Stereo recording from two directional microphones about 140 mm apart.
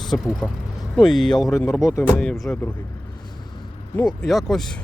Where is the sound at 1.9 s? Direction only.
20° left (ahead or behind).